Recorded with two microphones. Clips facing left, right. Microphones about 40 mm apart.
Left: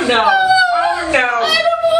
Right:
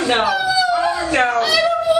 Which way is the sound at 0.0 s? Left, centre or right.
Left.